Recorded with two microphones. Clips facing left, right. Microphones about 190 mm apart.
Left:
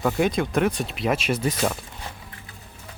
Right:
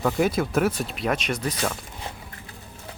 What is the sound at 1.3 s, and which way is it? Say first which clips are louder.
Speech: left 3 dB; 25° left (ahead or behind).